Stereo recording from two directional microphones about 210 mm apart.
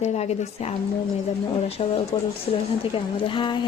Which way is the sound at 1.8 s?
30° left (ahead or behind).